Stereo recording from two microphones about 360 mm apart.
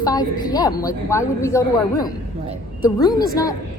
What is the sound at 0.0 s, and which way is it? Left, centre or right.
A woman's voice, centre.